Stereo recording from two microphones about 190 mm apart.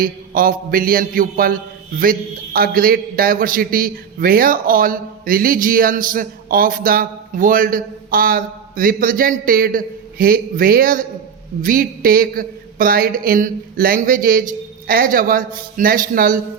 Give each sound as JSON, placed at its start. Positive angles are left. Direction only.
{"t": 0.0, "sound": "a man's voice", "side_deg": -50}